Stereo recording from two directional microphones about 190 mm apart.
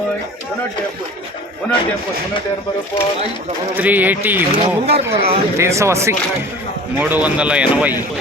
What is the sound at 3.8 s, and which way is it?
Speech, 10° right (ahead or behind).